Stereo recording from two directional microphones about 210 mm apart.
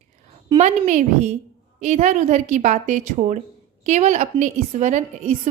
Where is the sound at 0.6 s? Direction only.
35° right (ahead or behind).